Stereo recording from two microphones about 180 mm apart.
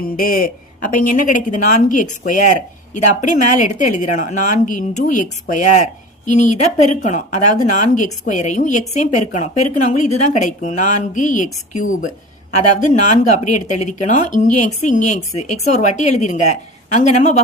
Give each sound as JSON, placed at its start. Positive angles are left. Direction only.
{"t": 0.2, "sound": "a woman's voice", "side_deg": 50}